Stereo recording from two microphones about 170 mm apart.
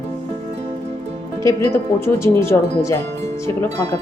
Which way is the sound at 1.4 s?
15° left (ahead or behind).